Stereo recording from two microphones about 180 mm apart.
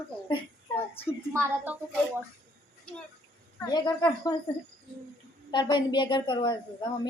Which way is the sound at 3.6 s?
20° left (ahead or behind).